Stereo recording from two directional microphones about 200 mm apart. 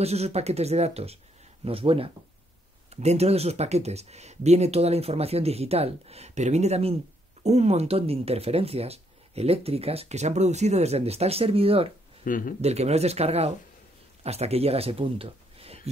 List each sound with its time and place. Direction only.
0.0 s speech: 30° right (ahead or behind)
12.3 s speech: 45° left (ahead or behind)
12.6 s speech: 30° right (ahead or behind)